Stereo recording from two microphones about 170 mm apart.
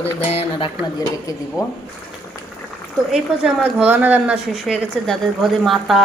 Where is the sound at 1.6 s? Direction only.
20° left (ahead or behind).